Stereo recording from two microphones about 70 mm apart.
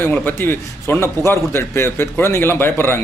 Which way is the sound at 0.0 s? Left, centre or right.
Left.